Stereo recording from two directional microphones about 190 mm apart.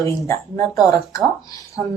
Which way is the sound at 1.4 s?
20° left (ahead or behind).